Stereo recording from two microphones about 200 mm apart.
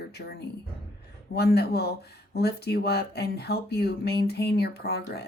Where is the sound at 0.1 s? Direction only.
55° left (ahead or behind).